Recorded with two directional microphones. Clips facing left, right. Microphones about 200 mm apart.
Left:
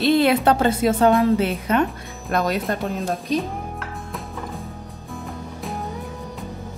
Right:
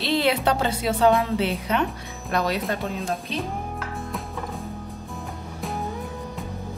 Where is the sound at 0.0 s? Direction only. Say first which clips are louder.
Left 5 dB; 50° left (ahead or behind).